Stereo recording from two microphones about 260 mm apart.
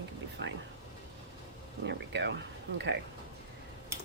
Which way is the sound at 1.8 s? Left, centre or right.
Right.